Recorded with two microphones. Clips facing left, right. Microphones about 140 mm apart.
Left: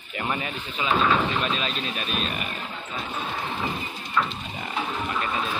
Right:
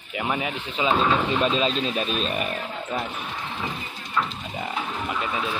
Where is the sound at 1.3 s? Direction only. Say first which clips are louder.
Right 5 dB; 30° right (ahead or behind).